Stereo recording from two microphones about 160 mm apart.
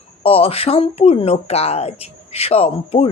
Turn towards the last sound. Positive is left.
turn(degrees=40)  # may be behind; listen again after turning